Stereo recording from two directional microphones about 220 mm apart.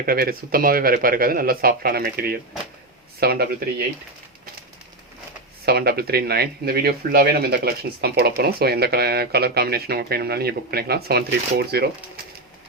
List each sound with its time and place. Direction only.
0.0 s speech: 40° right (ahead or behind)
5.6 s speech: 45° right (ahead or behind)